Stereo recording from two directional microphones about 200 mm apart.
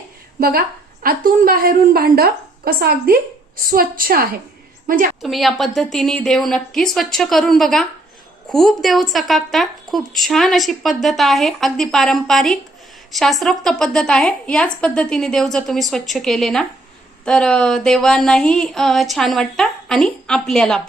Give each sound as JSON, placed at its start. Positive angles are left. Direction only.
{"t": 0.3, "sound": "a woman's voice", "side_deg": -50}
{"t": 5.2, "sound": "speech", "side_deg": 0}